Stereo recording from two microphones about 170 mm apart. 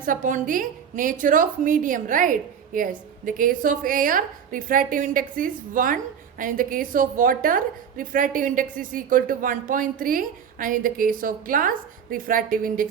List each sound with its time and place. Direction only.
0.0 s a woman's voice: 50° right (ahead or behind)